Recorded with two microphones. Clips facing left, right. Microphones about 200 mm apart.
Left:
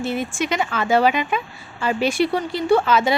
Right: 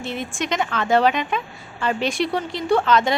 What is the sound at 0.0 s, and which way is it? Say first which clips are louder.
A woman's voice: left 4 dB; 5° left (ahead or behind).